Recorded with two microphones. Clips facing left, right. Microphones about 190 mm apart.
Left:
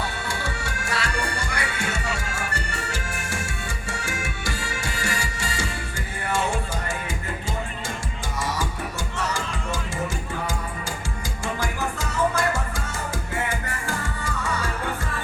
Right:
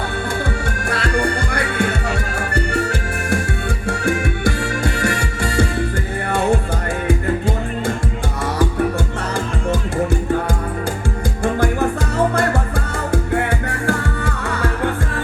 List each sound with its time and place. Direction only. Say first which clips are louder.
0.9 s music: right 9 dB; 55° right (ahead or behind)
7.1 s music: right 12 dB; 60° right (ahead or behind)
11.4 s music: right 11 dB; 55° right (ahead or behind)